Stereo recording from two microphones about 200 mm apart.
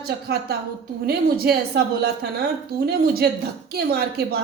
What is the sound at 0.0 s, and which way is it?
A woman's voice, 50° right (ahead or behind).